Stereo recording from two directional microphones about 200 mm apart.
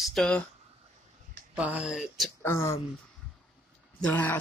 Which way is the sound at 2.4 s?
15° left (ahead or behind).